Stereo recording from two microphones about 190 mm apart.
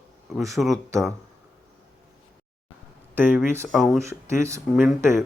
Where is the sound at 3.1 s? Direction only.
10° right (ahead or behind).